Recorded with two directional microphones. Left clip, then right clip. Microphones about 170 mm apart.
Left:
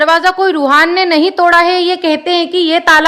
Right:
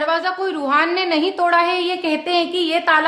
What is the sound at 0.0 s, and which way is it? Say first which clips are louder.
A woman's voice: left 10 dB; 45° left (ahead or behind).